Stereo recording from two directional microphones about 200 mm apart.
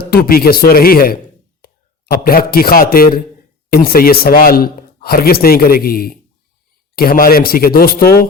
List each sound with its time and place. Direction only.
0.0 s a man's voice: 50° left (ahead or behind)